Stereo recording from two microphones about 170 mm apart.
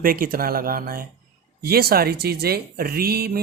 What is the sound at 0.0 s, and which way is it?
Speech, 60° right (ahead or behind).